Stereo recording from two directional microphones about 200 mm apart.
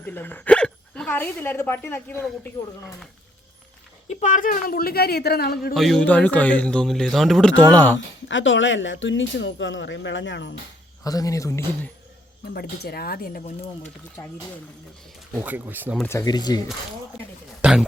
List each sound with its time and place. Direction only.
0.0 s a woman's voice: 10° left (ahead or behind)
4.1 s speech: 40° left (ahead or behind)
5.7 s a man's voice: centre (ahead or behind)
7.9 s speech: 70° left (ahead or behind)
11.0 s a man's voice: 15° left (ahead or behind)
12.5 s speech: 50° left (ahead or behind)
14.2 s a man's voice: 15° left (ahead or behind)
15.4 s speech: 10° right (ahead or behind)
16.0 s speech: 15° left (ahead or behind)
17.6 s a man's voice: 5° right (ahead or behind)